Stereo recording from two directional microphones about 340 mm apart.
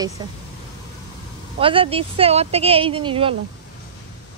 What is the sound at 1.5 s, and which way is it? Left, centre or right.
A woman's voice, centre.